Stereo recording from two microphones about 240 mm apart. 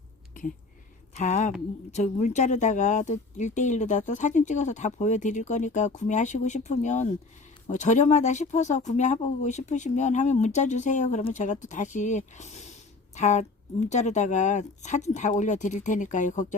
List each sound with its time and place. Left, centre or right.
1.1 s speech: left